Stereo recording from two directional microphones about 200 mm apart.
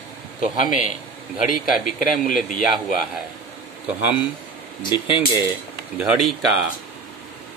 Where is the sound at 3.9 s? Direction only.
5° right (ahead or behind).